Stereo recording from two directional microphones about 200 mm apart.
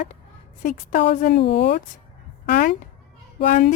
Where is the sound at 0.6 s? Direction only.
40° left (ahead or behind).